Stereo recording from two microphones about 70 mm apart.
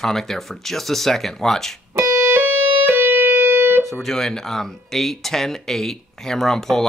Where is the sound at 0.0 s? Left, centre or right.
Centre.